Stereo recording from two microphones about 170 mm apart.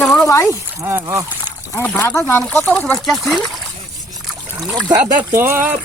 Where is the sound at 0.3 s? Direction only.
20° left (ahead or behind).